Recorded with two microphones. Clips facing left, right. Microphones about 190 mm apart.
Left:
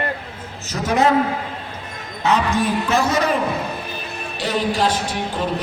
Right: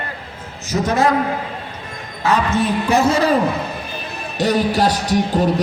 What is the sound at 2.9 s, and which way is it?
Speech, 25° right (ahead or behind).